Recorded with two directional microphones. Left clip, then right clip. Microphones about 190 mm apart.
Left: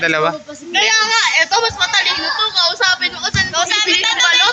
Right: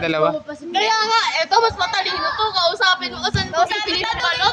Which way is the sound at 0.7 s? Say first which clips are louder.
Left 4 dB; 65° right (ahead or behind).